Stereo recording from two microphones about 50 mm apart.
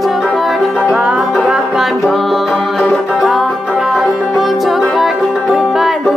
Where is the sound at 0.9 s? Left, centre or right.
Right.